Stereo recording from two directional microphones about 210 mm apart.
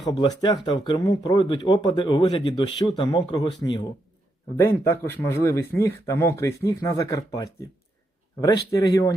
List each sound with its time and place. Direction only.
0.2 s speech: 20° left (ahead or behind)